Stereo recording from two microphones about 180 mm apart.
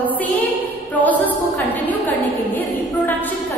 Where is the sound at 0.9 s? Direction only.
10° left (ahead or behind).